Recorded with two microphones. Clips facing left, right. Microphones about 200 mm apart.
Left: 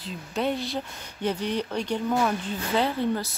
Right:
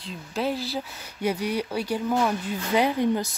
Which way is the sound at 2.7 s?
15° right (ahead or behind).